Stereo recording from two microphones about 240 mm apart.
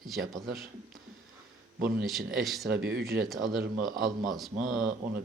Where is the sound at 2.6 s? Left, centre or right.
Right.